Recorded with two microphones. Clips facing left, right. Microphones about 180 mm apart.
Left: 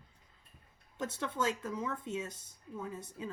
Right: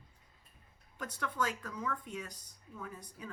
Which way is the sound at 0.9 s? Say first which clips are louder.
Left 2 dB; 25° left (ahead or behind).